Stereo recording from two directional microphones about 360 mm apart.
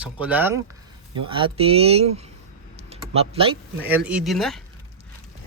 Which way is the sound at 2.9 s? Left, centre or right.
Centre.